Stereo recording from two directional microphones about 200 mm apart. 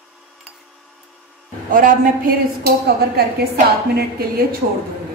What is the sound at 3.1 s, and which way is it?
A woman's voice, 50° right (ahead or behind).